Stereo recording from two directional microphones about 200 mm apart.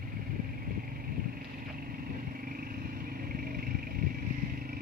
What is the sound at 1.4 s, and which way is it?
Vehicle, 45° right (ahead or behind).